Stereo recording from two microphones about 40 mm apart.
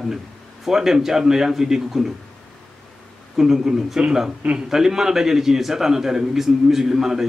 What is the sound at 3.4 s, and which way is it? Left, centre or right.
A man's voice, centre.